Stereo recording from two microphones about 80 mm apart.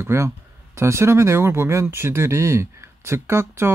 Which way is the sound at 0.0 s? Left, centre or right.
Right.